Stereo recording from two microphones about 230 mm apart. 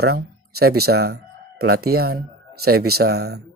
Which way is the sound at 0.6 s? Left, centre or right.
Right.